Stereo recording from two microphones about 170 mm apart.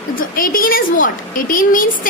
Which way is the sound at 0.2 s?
55° left (ahead or behind).